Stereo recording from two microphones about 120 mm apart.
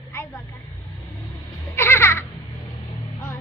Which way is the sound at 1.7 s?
20° left (ahead or behind).